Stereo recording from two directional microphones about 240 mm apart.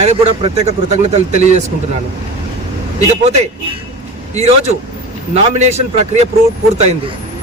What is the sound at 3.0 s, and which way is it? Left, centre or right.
A man's voice, right.